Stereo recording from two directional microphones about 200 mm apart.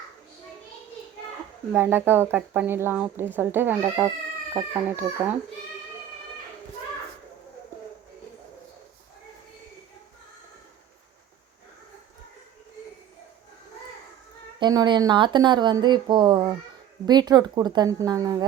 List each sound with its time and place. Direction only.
1.7 s speech: 10° right (ahead or behind)
14.6 s speech: 20° right (ahead or behind)